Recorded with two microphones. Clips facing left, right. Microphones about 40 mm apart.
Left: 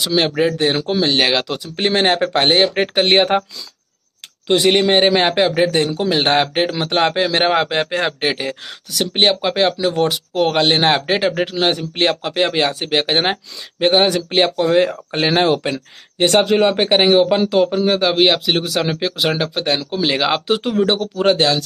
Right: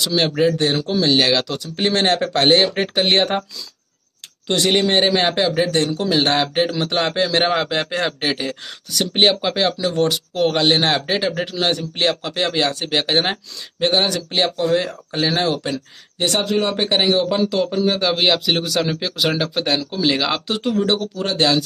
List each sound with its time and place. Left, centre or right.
0.0 s speech: centre
0.7 s speech: left
1.0 s speech: centre
4.5 s a man's voice: centre
8.9 s a man's voice: centre
14.4 s a man's voice: left; by 19.8 s centre
19.8 s speech: centre
21.4 s speech: centre